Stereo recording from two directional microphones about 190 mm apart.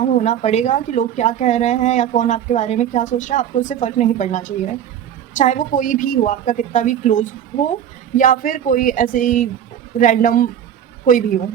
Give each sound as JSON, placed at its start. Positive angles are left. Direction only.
{"t": 0.0, "sound": "a woman's voice", "side_deg": 40}